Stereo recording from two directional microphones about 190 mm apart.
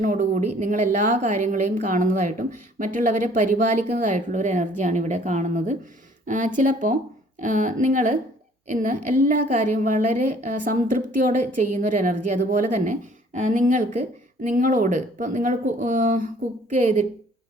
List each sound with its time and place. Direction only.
0.0 s a woman's voice: 45° right (ahead or behind)